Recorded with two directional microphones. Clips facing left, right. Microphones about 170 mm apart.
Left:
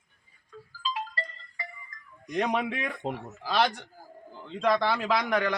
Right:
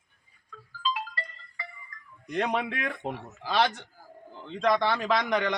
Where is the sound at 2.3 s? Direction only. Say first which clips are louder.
Left 1 dB; 10° left (ahead or behind).